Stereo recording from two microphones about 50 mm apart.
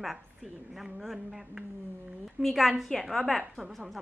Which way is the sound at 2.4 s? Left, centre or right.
Centre.